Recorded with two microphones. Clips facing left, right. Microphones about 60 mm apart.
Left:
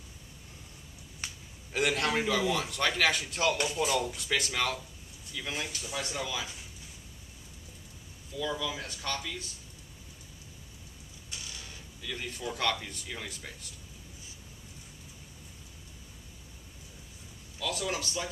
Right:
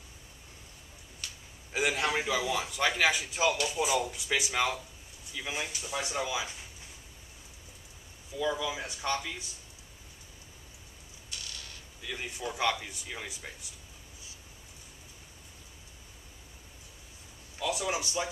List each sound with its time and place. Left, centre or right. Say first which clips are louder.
1.2 s a sound: left 3 dB; left
1.7 s a man's voice: left 1 dB; centre
8.4 s a man's voice: right 2 dB; centre
12.0 s a man's voice: even; centre
17.6 s a man's voice: right 2 dB; centre